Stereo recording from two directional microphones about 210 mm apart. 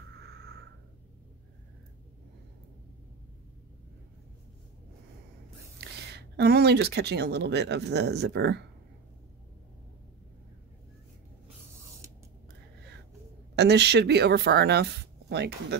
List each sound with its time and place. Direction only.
6.1 s speech: 50° right (ahead or behind)
13.6 s speech: 50° right (ahead or behind)